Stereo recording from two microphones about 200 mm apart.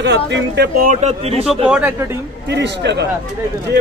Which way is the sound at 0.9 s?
35° right (ahead or behind).